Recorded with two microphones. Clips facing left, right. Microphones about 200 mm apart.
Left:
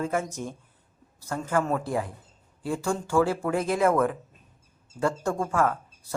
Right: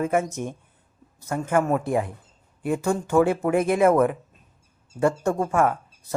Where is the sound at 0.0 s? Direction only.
20° right (ahead or behind).